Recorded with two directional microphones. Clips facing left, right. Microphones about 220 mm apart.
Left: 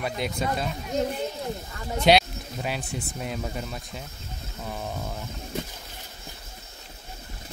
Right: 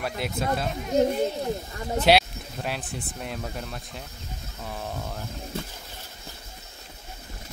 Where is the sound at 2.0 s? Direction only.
5° right (ahead or behind).